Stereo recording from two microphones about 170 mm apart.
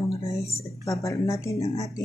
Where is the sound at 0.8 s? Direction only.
20° left (ahead or behind).